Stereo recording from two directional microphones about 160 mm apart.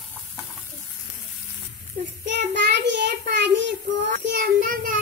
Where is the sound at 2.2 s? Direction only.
90° right.